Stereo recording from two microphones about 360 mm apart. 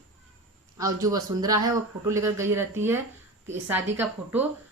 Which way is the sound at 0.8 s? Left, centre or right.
Centre.